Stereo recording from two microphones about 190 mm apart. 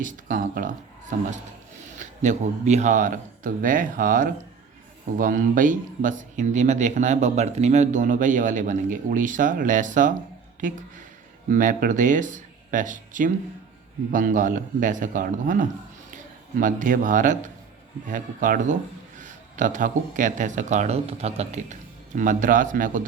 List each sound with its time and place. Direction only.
0.0 s speech: 45° right (ahead or behind)
2.0 s speech: 40° right (ahead or behind)